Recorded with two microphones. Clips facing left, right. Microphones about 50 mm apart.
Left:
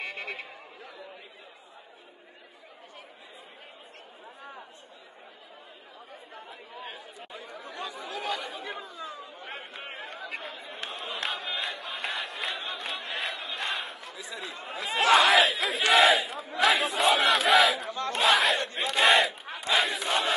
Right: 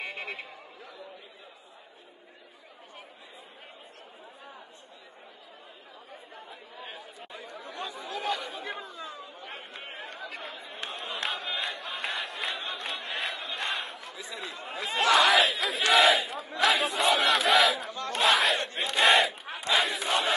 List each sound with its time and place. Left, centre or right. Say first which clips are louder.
0.0 s a sound: left 1 dB; centre
6.3 s chatter: left 3 dB; centre
7.3 s chatter: even; left
9.5 s chatter: left 3 dB; centre
10.4 s crowd: even; centre
14.7 s chatter: left 2 dB; centre
15.9 s crowd: left 1 dB; centre
16.6 s battle cry: left 1 dB; centre
18.8 s crowd: even; centre
19.6 s battle cry: even; centre